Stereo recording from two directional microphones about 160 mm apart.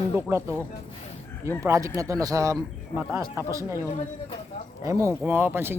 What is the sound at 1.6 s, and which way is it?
A man's voice, 20° right (ahead or behind).